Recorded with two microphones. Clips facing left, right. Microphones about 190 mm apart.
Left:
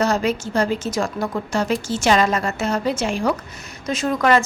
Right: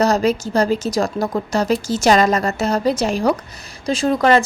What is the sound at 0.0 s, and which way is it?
Speech, 40° right (ahead or behind).